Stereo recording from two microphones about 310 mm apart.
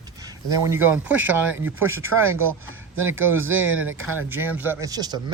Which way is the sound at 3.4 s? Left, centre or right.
Right.